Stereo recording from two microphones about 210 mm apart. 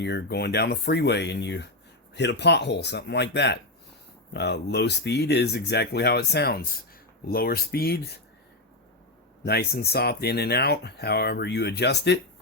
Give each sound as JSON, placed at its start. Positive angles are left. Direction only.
{"t": 0.0, "sound": "speech", "side_deg": 55}
{"t": 9.4, "sound": "speech", "side_deg": 50}